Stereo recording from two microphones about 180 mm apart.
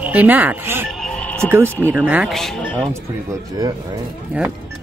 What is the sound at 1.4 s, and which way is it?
Speech, 15° right (ahead or behind).